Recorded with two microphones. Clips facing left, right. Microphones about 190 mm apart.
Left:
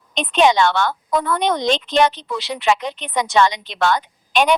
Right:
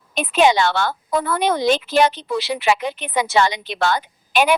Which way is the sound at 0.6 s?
35° right (ahead or behind).